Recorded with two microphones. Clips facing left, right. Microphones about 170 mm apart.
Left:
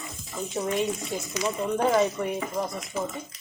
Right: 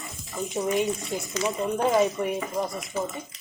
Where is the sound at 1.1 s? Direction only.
20° left (ahead or behind).